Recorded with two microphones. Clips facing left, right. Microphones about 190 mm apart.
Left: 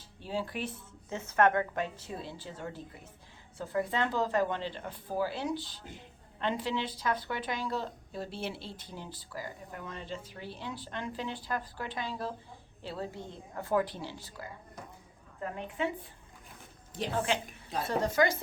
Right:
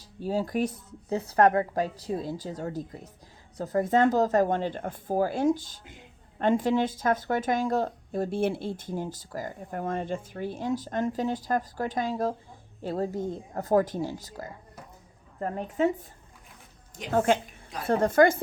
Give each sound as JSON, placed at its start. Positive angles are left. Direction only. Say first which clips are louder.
{"t": 0.0, "sound": "a woman's voice", "louder": "right 7 dB", "side_deg": -40}
{"t": 17.1, "sound": "speech", "louder": "right 9 dB", "side_deg": -50}